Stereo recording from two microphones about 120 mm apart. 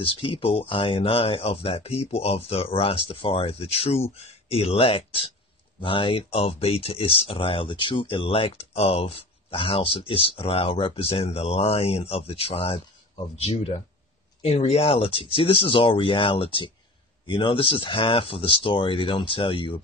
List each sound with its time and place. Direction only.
0.0 s speech: 50° left (ahead or behind)